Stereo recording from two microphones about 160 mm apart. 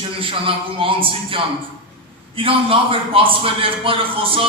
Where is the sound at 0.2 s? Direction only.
35° right (ahead or behind).